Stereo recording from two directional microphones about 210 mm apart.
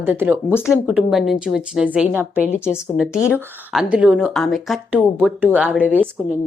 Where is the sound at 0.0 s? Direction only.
10° right (ahead or behind).